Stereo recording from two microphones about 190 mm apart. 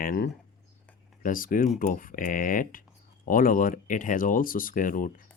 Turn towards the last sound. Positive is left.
turn(degrees=45)  # may be behind; listen again after turning